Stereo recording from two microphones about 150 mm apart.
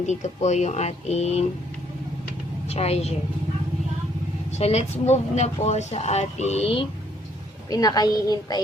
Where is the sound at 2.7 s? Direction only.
45° left (ahead or behind).